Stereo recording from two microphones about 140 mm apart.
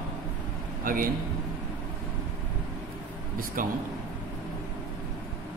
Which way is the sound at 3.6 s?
75° right (ahead or behind).